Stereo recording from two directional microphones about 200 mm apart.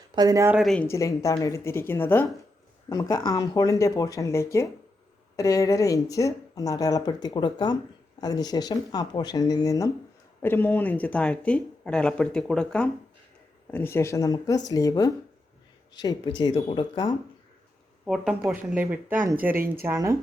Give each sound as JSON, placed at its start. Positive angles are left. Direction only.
{"t": 0.1, "sound": "speech", "side_deg": -20}
{"t": 0.5, "sound": "speech", "side_deg": 0}
{"t": 0.9, "sound": "speech", "side_deg": 15}
{"t": 18.0, "sound": "speech", "side_deg": -5}
{"t": 19.5, "sound": "speech", "side_deg": -45}
{"t": 19.8, "sound": "speech", "side_deg": -15}